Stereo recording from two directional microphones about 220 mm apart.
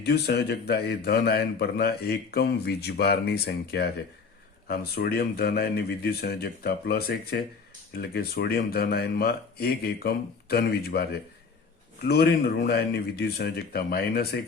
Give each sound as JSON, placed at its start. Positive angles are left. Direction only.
{"t": 0.0, "sound": "speech", "side_deg": 50}